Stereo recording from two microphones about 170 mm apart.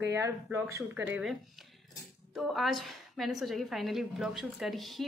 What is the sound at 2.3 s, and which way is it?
A woman's voice, centre (ahead or behind).